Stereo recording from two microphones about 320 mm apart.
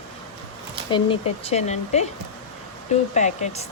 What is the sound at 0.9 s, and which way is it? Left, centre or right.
Speech, centre.